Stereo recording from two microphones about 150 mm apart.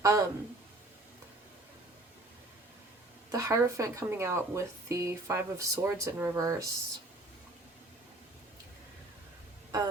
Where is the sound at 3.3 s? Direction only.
20° right (ahead or behind).